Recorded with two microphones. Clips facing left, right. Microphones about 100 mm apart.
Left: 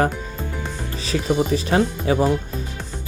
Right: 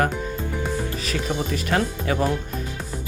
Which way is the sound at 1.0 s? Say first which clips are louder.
Left 9 dB; 25° left (ahead or behind).